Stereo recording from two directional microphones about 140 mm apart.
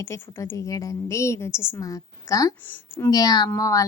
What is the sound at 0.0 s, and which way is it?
A woman's voice, 20° left (ahead or behind).